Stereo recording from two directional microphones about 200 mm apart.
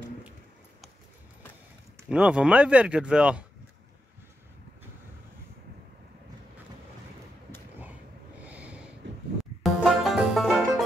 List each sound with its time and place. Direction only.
2.0 s speech: 5° right (ahead or behind)
8.5 s snort: 5° right (ahead or behind)
9.0 s music: 65° right (ahead or behind)
9.4 s music: centre (ahead or behind)